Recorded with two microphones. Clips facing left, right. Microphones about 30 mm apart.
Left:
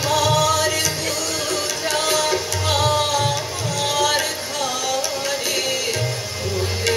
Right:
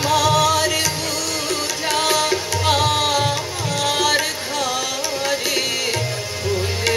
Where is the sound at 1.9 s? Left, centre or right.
Centre.